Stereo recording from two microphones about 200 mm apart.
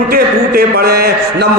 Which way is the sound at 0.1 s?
50° right (ahead or behind).